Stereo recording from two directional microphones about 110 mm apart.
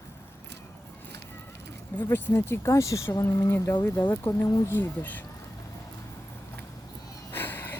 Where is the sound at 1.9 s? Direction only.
20° left (ahead or behind).